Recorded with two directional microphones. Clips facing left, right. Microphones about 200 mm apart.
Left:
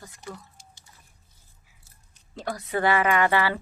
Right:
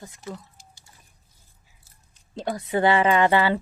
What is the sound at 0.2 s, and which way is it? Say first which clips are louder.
Speech: right 3 dB; centre (ahead or behind).